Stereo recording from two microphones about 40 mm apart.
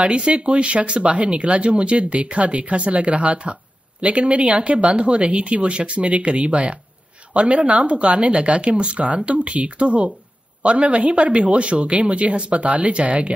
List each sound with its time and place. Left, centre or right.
0.0 s speech: right